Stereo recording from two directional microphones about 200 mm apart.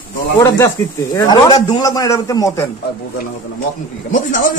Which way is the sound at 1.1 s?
20° left (ahead or behind).